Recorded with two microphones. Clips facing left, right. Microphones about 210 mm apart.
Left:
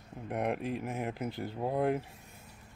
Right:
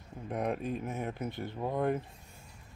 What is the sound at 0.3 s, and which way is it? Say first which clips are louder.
Speech: even; 10° left (ahead or behind).